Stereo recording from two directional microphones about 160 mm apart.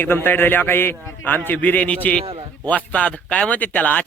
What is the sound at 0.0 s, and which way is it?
A man's voice, 15° left (ahead or behind).